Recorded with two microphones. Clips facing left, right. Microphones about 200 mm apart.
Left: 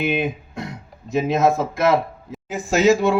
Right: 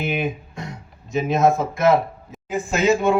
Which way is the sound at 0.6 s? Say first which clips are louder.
Left 3 dB; 60° left (ahead or behind).